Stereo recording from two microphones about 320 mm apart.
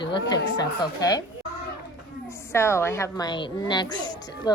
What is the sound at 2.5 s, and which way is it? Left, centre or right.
A woman's voice, centre.